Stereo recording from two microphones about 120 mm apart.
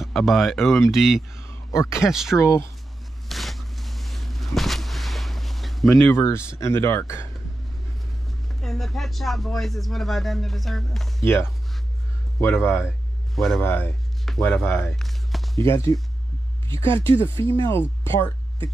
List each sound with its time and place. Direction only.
0.0 s speech: centre (ahead or behind)
1.4 s a sound: 25° left (ahead or behind)
2.0 s speech: 5° right (ahead or behind)
2.3 s speech: 20° left (ahead or behind)
3.3 s a sound: centre (ahead or behind)
6.2 s speech: 20° left (ahead or behind)
8.5 s speech: centre (ahead or behind)
11.2 s speech: 20° left (ahead or behind)
13.3 s speech: centre (ahead or behind)
13.6 s speech: 15° left (ahead or behind)
15.0 s walk: centre (ahead or behind)
15.5 s speech: 25° left (ahead or behind)
17.2 s speech: 25° left (ahead or behind)